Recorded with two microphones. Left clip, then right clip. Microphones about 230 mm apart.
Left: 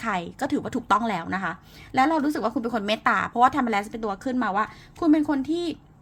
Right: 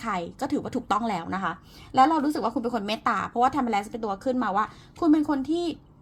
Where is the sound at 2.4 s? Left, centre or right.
Left.